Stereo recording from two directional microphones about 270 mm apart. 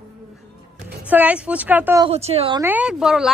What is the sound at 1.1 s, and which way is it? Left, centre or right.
Speech, centre.